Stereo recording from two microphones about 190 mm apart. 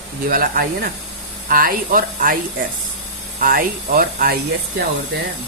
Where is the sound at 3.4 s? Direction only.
45° right (ahead or behind).